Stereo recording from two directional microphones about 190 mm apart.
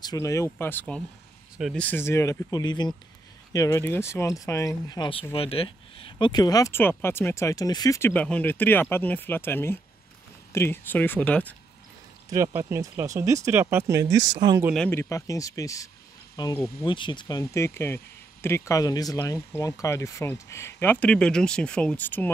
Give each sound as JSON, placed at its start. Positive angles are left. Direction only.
{"t": 0.0, "sound": "speech", "side_deg": 20}
{"t": 12.3, "sound": "speech", "side_deg": -15}
{"t": 14.7, "sound": "speech", "side_deg": 10}